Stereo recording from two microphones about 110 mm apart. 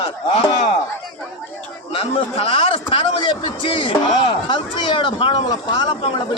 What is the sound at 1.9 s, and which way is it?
A man's voice, 60° left (ahead or behind).